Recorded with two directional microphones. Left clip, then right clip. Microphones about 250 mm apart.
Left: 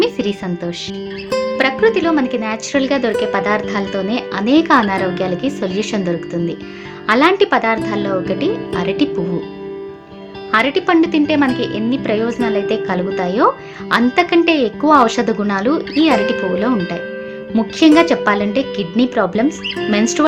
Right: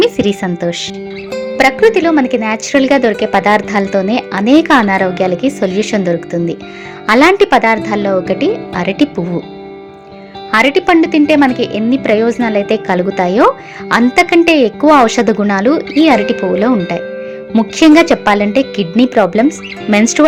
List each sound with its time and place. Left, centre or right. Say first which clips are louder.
0.0 s a woman's voice: right 6 dB; right
10.5 s speech: right 4 dB; right